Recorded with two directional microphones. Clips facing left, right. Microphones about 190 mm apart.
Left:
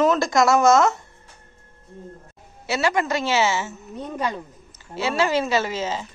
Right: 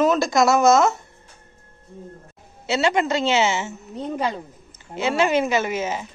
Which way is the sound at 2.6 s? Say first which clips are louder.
Right 2 dB; 25° right (ahead or behind).